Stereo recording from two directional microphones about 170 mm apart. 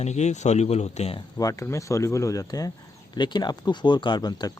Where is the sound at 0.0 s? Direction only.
40° left (ahead or behind).